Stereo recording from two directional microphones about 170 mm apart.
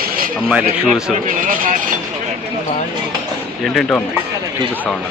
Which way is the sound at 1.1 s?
50° right (ahead or behind).